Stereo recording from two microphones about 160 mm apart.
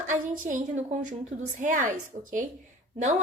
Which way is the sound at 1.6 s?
55° right (ahead or behind).